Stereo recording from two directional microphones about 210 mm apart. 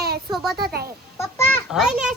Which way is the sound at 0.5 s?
50° right (ahead or behind).